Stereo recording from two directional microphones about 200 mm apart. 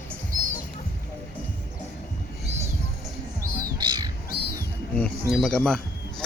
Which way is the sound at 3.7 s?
20° right (ahead or behind).